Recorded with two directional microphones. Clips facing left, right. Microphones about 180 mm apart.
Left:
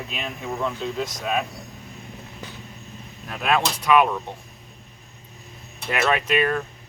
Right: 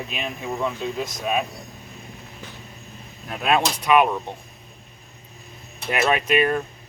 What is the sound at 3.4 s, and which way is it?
Speech, 15° right (ahead or behind).